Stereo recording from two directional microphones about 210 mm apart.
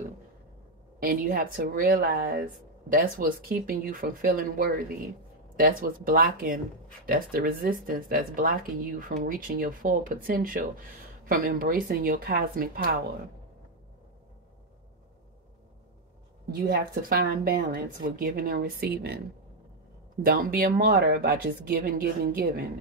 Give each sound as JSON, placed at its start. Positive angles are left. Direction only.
{"t": 0.9, "sound": "speech", "side_deg": -45}
{"t": 16.5, "sound": "speech", "side_deg": -45}
{"t": 20.2, "sound": "speech", "side_deg": -45}